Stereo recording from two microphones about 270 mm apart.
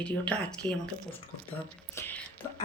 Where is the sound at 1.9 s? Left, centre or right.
Centre.